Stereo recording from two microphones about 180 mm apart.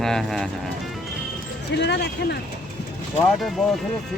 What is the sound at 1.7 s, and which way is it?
Speech, 70° left (ahead or behind).